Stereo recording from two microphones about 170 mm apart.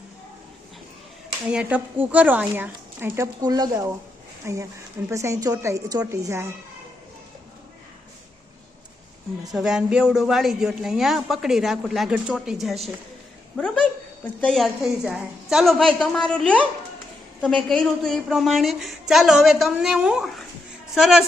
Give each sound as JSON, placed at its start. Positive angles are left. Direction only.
{"t": 1.5, "sound": "speech", "side_deg": -10}
{"t": 9.5, "sound": "a woman's voice", "side_deg": 0}